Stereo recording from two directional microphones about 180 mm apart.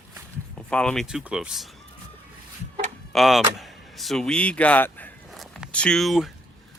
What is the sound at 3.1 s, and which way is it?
Speech, centre (ahead or behind).